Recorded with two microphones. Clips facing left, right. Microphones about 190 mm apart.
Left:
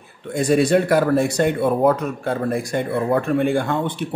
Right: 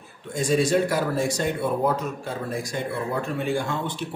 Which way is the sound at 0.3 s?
60° left (ahead or behind).